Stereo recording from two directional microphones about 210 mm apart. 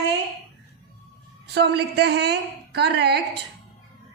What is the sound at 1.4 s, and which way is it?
A woman's voice, 50° right (ahead or behind).